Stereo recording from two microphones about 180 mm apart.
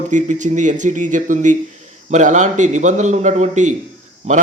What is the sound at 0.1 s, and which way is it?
A man's voice, 45° right (ahead or behind).